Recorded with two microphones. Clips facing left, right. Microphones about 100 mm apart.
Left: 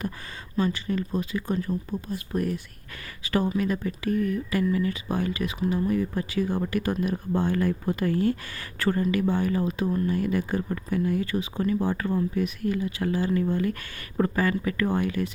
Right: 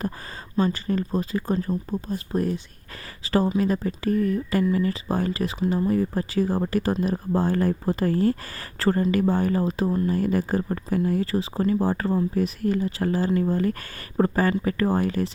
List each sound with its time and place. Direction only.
0.5 s speech: 40° right (ahead or behind)